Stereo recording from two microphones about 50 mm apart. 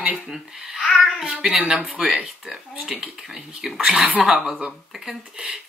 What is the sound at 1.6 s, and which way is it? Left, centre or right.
Speech, centre.